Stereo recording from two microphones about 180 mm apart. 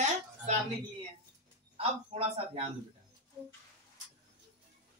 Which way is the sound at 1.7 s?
30° right (ahead or behind).